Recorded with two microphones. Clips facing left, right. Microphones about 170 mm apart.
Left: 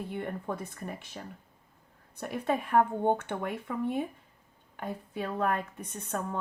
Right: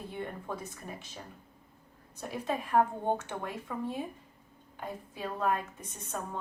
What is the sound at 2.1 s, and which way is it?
A woman's voice, 60° left (ahead or behind).